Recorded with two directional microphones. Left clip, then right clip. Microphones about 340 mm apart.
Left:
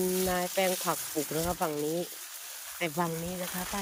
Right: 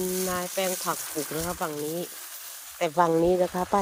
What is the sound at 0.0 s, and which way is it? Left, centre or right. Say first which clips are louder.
Speech: right 1 dB; centre.